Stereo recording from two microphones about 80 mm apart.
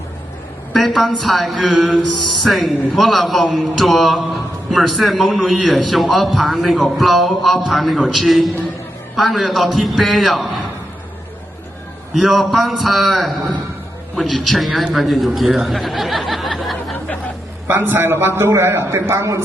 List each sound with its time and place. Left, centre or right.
0.7 s a man's voice: centre
12.1 s a man's voice: centre
17.7 s a man's voice: right